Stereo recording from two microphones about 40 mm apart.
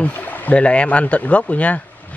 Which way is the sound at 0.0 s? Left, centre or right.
Left.